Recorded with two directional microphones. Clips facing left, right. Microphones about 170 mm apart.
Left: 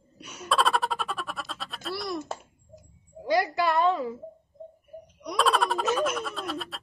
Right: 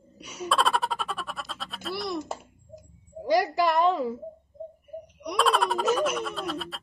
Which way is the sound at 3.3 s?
Centre (ahead or behind).